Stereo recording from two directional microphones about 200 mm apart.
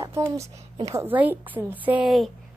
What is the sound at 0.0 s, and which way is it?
A woman's voice, 15° right (ahead or behind).